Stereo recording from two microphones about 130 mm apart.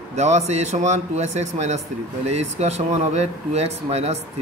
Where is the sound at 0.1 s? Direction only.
60° right (ahead or behind).